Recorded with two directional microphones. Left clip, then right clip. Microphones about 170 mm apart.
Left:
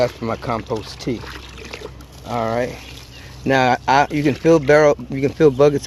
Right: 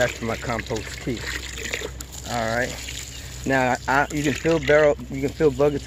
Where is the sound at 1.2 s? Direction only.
20° right (ahead or behind).